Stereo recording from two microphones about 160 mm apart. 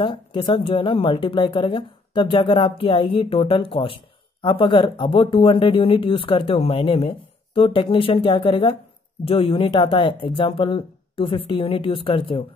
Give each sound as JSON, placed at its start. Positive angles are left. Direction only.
{"t": 0.0, "sound": "speech", "side_deg": 30}